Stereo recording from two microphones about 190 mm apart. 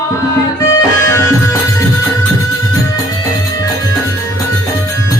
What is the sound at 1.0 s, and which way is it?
Music, 15° left (ahead or behind).